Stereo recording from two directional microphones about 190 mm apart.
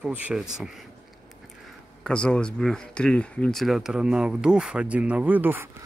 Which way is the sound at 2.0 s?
5° left (ahead or behind).